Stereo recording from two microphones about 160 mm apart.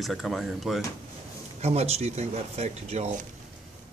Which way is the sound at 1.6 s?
40° right (ahead or behind).